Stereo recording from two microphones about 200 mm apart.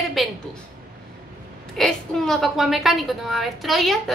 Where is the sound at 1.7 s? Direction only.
Centre (ahead or behind).